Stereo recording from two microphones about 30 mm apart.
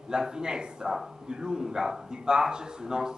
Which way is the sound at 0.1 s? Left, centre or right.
Right.